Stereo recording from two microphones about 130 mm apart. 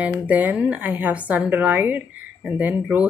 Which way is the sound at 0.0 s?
10° right (ahead or behind).